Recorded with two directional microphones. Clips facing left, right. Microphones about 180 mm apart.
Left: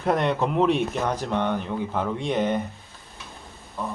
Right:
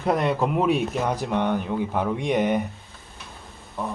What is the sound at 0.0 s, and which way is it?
Speech, 5° right (ahead or behind).